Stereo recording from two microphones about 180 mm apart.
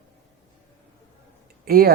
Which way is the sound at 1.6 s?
55° right (ahead or behind).